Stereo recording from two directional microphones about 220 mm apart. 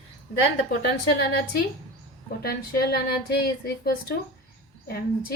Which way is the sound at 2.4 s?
45° left (ahead or behind).